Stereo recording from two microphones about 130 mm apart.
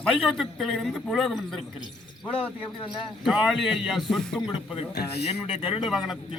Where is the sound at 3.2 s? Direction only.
5° right (ahead or behind).